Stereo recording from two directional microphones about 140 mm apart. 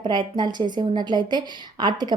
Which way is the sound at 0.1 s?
30° right (ahead or behind).